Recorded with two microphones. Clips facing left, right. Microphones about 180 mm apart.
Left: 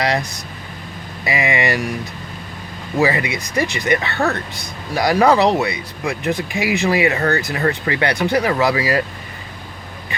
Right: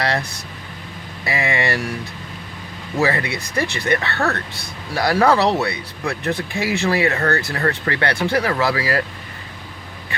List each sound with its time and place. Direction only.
0.0 s speech: 15° left (ahead or behind)
3.0 s speech: 15° left (ahead or behind)